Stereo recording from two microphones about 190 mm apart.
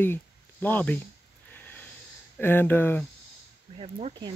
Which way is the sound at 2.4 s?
10° left (ahead or behind).